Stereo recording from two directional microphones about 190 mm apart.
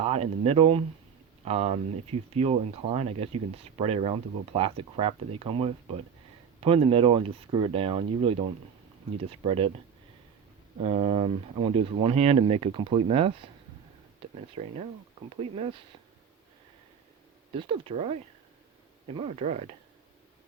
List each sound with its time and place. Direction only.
0.0 s speech: 30° right (ahead or behind)
10.8 s speech: 30° right (ahead or behind)
14.5 s speech: 35° right (ahead or behind)
17.5 s speech: 30° right (ahead or behind)